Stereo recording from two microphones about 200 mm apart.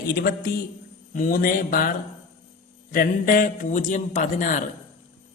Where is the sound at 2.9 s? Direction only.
45° left (ahead or behind).